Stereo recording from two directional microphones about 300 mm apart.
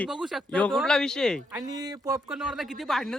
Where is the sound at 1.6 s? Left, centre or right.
Centre.